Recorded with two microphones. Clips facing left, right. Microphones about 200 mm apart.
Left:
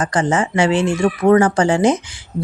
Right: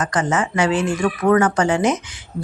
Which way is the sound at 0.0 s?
30° left (ahead or behind).